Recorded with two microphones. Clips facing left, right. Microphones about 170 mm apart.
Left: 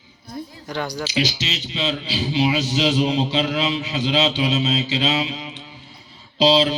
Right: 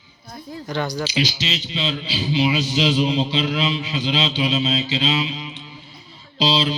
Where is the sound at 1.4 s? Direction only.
25° right (ahead or behind).